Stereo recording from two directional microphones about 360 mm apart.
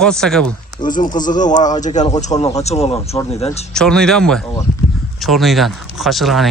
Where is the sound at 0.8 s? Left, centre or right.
Left.